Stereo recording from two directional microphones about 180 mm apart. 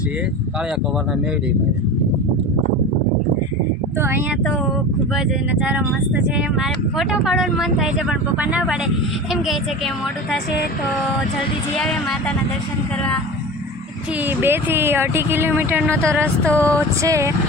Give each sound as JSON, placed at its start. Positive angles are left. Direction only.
{"t": 5.1, "sound": "speech", "side_deg": -5}
{"t": 11.8, "sound": "speech", "side_deg": 5}
{"t": 14.3, "sound": "speech", "side_deg": -10}
{"t": 16.5, "sound": "a sound", "side_deg": 10}
{"t": 16.7, "sound": "speech", "side_deg": -15}